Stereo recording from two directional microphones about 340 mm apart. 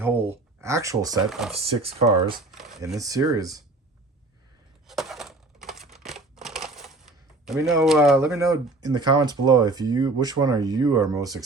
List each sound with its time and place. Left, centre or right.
0.0 s speech: centre
1.5 s speech: centre
2.5 s speech: centre
4.9 s crumpling: centre
7.4 s speech: centre